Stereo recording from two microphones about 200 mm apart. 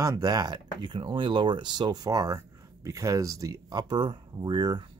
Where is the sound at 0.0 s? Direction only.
15° right (ahead or behind).